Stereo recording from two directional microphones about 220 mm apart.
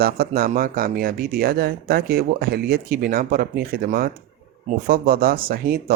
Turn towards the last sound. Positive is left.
turn(degrees=-45)  # may be behind; listen again after turning